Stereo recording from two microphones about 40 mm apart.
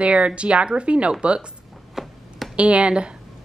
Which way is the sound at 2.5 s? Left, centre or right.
Right.